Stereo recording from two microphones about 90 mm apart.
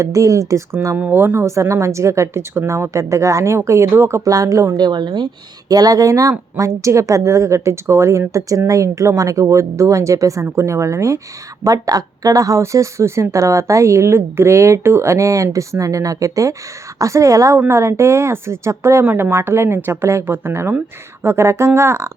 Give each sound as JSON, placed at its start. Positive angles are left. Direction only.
{"t": 0.0, "sound": "a woman's voice", "side_deg": -40}
{"t": 0.9, "sound": "a woman's voice", "side_deg": -20}
{"t": 4.2, "sound": "a woman's voice", "side_deg": -40}
{"t": 4.8, "sound": "a woman's voice", "side_deg": -50}